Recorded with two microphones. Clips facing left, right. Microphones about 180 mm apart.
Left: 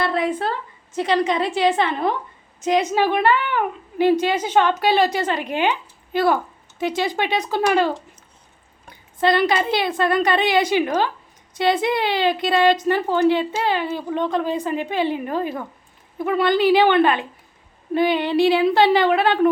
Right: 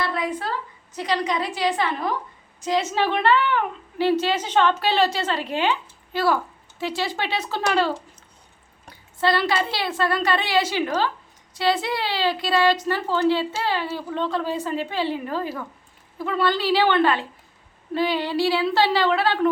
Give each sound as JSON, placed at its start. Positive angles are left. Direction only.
{"t": 1.2, "sound": "a woman's voice", "side_deg": 25}
{"t": 9.2, "sound": "a woman's voice", "side_deg": 20}